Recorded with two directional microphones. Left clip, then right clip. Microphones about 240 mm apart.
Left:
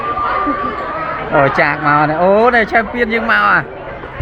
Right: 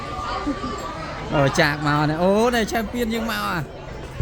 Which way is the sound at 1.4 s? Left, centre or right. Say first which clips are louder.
Left 7 dB; right.